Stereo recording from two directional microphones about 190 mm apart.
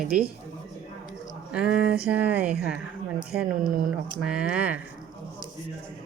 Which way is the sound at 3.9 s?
5° right (ahead or behind).